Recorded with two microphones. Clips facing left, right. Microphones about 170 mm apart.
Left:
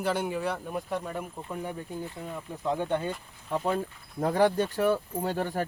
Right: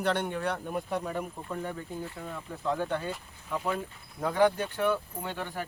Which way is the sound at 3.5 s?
35° left (ahead or behind).